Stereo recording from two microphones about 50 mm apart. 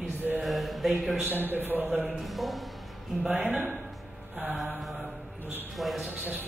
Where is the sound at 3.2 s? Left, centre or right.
Centre.